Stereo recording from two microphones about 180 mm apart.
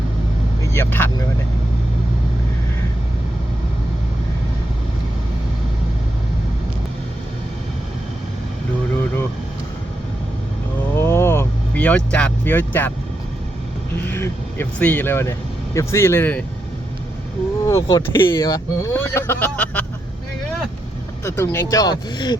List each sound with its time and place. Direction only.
0.7 s speech: 15° left (ahead or behind)
10.9 s vehicle: 15° left (ahead or behind)
14.1 s speech: 10° left (ahead or behind)
17.7 s speech: 15° left (ahead or behind)
21.2 s speech: 15° left (ahead or behind)